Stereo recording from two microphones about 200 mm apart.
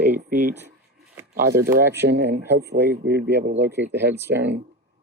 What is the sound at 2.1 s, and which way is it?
Speech, 55° right (ahead or behind).